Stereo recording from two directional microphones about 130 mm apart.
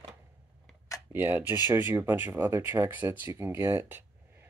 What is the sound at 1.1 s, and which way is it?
Speech, 15° right (ahead or behind).